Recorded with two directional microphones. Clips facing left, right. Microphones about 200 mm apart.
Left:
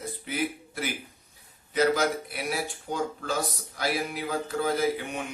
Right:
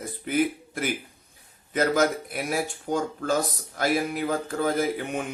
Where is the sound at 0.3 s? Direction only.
50° right (ahead or behind).